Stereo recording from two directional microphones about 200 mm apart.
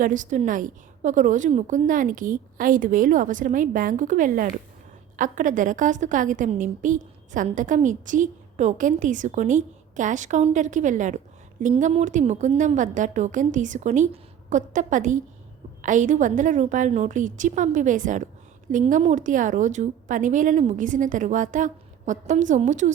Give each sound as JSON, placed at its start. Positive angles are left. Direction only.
{"t": 0.0, "sound": "a woman's voice", "side_deg": -40}